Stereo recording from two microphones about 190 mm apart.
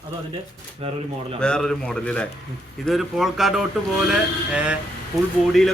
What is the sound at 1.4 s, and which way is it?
A man's voice, 5° left (ahead or behind).